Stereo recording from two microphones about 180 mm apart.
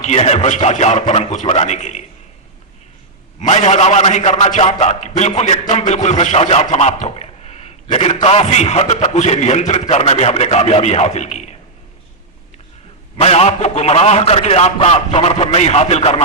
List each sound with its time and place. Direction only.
0.0 s music: 40° left (ahead or behind)
3.4 s music: 40° left (ahead or behind)
13.1 s music: 35° left (ahead or behind)